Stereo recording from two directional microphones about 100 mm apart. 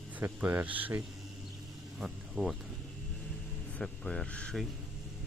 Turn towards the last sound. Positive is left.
turn(degrees=10)  # may be behind; listen again after turning